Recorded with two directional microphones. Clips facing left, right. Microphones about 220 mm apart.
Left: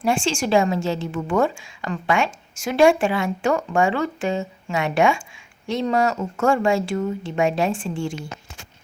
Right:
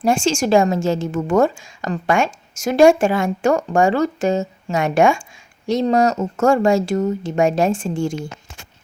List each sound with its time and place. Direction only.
0.0 s a woman's voice: 45° right (ahead or behind)